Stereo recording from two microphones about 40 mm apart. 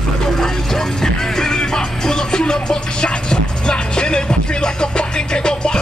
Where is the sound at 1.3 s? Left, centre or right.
Centre.